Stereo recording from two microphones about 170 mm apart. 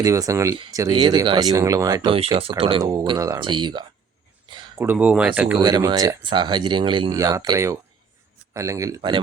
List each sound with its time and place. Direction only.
0.0 s speech: 20° right (ahead or behind)
2.4 s speech: 35° right (ahead or behind)
4.8 s speech: 10° right (ahead or behind)
5.5 s speech: 25° right (ahead or behind)
9.0 s speech: 30° right (ahead or behind)